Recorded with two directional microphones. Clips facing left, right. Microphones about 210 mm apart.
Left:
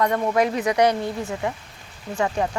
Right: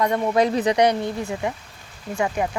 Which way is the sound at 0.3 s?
30° right (ahead or behind).